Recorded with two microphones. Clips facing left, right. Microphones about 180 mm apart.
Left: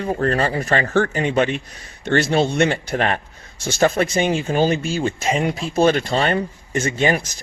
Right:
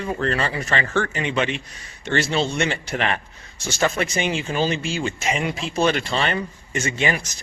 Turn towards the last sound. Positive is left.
turn(degrees=45)  # may be behind; listen again after turning